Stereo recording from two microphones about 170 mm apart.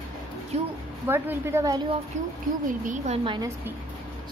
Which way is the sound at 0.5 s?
40° right (ahead or behind).